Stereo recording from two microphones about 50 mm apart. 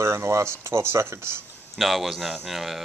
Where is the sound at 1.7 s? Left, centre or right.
Centre.